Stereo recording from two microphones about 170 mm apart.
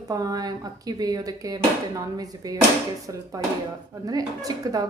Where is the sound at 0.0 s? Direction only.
20° right (ahead or behind).